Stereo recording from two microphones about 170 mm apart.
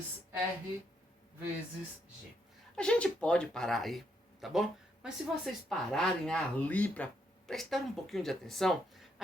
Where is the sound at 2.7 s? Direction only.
5° left (ahead or behind).